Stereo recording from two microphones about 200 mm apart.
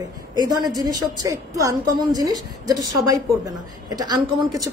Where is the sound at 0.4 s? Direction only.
20° right (ahead or behind).